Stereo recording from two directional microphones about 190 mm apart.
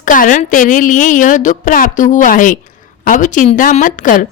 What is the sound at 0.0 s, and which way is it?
A woman's voice, 45° left (ahead or behind).